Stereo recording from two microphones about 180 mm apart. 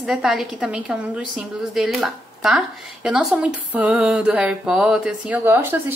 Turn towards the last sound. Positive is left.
turn(degrees=-10)  # may be behind; listen again after turning